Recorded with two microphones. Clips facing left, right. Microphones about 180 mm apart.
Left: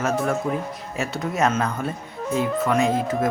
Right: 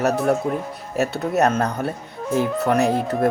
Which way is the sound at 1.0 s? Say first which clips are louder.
Right 4 dB; 65° right (ahead or behind).